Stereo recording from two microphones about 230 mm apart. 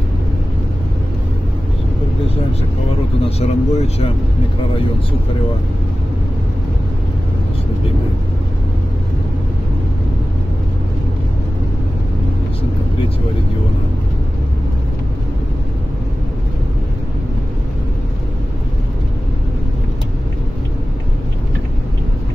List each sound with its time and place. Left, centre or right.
3.3 s speech: left